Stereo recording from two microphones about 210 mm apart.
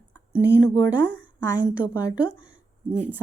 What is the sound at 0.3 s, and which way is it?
A woman's voice, 5° right (ahead or behind).